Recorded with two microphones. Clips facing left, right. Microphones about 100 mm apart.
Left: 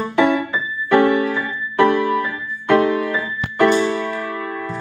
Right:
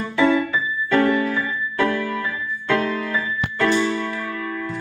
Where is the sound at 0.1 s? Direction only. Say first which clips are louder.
Left 1 dB; 20° left (ahead or behind).